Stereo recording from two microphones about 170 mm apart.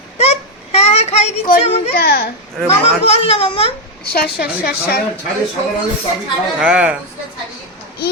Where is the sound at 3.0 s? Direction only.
35° left (ahead or behind).